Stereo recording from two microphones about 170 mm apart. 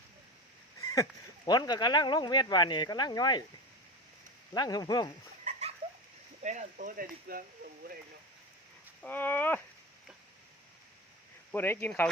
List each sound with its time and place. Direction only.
0.8 s a sound: 20° left (ahead or behind)
1.5 s speech: 25° left (ahead or behind)
4.5 s speech: 25° left (ahead or behind)
5.5 s a sound: 40° right (ahead or behind)
6.4 s speech: 45° right (ahead or behind); by 7.9 s 60° right (ahead or behind)
9.0 s speech: 10° left (ahead or behind)
11.5 s speech: 10° left (ahead or behind)